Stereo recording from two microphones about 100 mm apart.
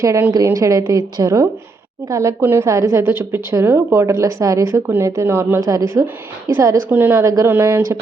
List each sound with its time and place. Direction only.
0.0 s a woman's voice: 30° right (ahead or behind)
6.9 s a woman's voice: 20° right (ahead or behind)